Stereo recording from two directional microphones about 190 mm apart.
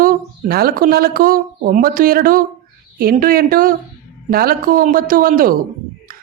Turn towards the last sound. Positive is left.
turn(degrees=-50)  # may be behind; listen again after turning